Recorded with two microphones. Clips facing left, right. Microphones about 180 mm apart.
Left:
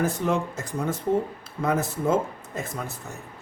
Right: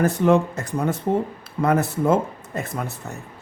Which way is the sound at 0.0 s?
60° right (ahead or behind).